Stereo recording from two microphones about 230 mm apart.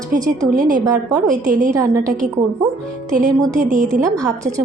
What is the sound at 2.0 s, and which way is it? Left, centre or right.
Speech, right.